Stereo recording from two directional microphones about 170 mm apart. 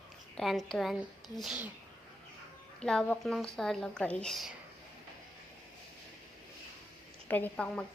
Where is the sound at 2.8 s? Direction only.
5° left (ahead or behind).